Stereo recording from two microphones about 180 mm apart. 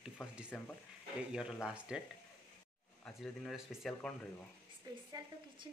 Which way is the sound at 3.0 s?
Centre (ahead or behind).